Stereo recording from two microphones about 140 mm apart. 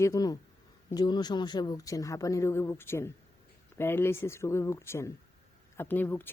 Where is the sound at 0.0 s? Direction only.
25° left (ahead or behind).